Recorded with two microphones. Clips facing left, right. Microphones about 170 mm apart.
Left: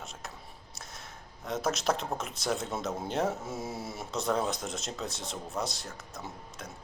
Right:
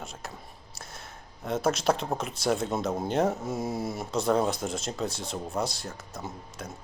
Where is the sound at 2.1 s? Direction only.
Centre (ahead or behind).